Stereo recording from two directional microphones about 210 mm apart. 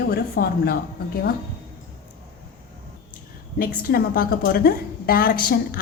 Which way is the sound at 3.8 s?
45° left (ahead or behind).